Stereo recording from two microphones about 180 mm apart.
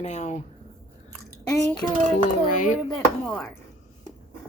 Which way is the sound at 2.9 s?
5° left (ahead or behind).